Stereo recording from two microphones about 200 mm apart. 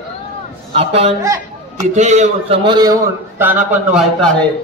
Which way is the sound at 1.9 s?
35° right (ahead or behind).